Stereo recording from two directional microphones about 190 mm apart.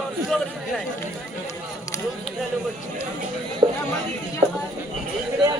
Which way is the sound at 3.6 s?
20° right (ahead or behind).